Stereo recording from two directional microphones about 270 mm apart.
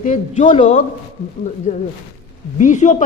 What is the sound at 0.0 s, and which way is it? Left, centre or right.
Speech, left.